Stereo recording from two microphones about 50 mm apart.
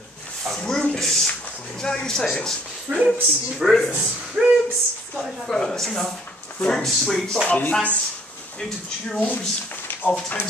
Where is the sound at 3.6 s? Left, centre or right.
Centre.